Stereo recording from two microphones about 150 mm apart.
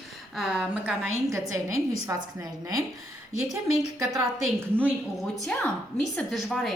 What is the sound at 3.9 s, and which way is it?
Speech, 20° right (ahead or behind).